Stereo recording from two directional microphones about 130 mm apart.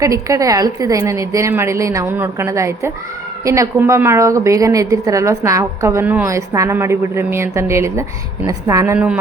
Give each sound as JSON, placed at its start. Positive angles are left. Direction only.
{"t": 0.0, "sound": "a woman's voice", "side_deg": -25}